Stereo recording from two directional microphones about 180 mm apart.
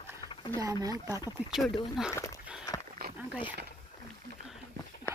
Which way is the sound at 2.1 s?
15° left (ahead or behind).